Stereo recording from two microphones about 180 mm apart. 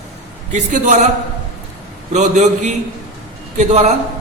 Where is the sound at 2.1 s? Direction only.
40° right (ahead or behind).